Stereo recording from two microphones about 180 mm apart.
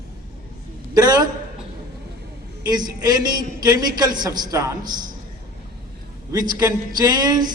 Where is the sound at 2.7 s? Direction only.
20° right (ahead or behind).